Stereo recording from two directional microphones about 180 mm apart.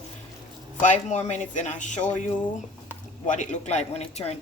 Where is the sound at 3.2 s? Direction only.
40° left (ahead or behind).